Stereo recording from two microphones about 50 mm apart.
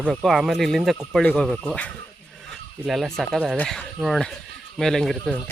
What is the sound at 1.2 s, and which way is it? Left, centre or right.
Speech, left.